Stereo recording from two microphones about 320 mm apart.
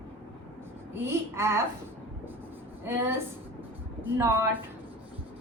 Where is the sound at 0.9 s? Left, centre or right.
Centre.